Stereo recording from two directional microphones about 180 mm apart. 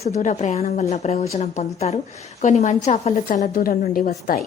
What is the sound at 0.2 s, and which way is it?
A woman's voice, 40° left (ahead or behind).